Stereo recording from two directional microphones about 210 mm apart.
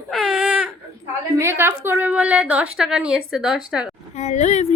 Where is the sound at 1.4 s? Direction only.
10° right (ahead or behind).